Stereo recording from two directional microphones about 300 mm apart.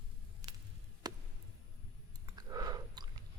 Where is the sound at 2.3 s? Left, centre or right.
Centre.